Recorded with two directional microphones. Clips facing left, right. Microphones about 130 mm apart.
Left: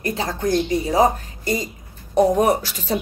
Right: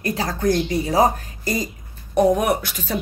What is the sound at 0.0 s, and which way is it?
A woman's voice, 25° left (ahead or behind).